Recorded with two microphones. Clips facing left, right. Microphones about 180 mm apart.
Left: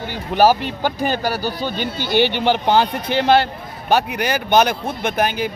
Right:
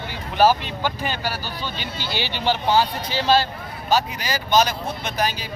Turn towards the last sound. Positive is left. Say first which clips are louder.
# left 6 dB
turn(degrees=55)  # may be behind; listen again after turning